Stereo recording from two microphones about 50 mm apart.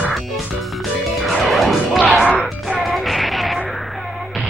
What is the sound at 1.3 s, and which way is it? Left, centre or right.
Music, centre.